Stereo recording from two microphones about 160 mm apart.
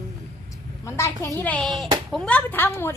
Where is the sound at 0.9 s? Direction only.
15° left (ahead or behind).